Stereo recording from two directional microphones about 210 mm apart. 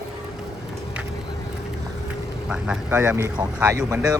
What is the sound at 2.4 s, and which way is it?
Speech, 5° right (ahead or behind).